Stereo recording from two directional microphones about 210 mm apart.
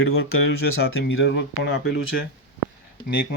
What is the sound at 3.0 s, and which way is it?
Speech, 20° left (ahead or behind).